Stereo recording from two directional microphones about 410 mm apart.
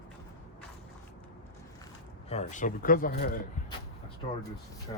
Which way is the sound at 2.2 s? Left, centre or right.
Centre.